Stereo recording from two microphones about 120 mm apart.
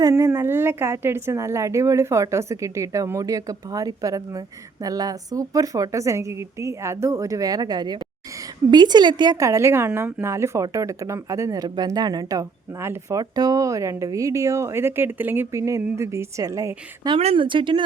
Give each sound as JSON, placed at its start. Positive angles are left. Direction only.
{"t": 0.0, "sound": "a woman's voice", "side_deg": -25}
{"t": 17.2, "sound": "speech", "side_deg": -60}
{"t": 17.4, "sound": "speech", "side_deg": -45}